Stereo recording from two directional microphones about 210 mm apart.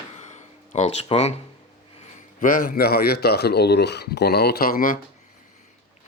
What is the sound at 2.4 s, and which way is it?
Speech, 40° left (ahead or behind).